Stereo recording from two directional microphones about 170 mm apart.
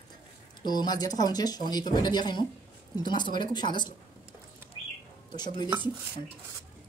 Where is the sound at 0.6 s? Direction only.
25° left (ahead or behind).